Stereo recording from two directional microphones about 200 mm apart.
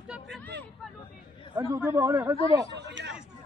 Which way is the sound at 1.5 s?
15° right (ahead or behind).